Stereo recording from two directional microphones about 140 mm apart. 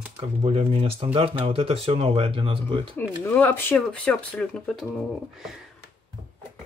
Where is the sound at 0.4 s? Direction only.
45° right (ahead or behind).